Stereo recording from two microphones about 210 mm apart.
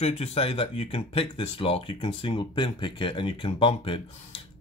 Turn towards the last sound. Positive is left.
turn(degrees=25)  # may be behind; listen again after turning